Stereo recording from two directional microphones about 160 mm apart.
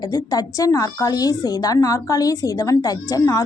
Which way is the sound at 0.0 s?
25° left (ahead or behind).